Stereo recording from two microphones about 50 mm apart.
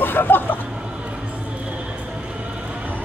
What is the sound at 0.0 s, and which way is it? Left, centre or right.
Vehicle, left.